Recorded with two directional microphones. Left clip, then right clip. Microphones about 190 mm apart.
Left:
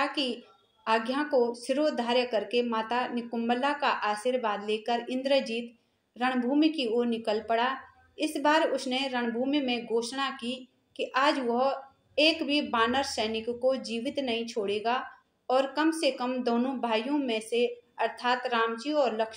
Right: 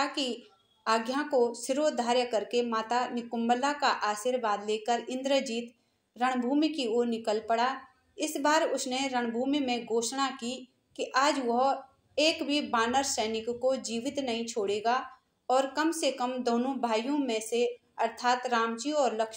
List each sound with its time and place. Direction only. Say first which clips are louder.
0.0 s speech: left 2 dB; 35° right (ahead or behind)